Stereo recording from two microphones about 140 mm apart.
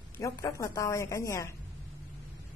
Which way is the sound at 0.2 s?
25° left (ahead or behind).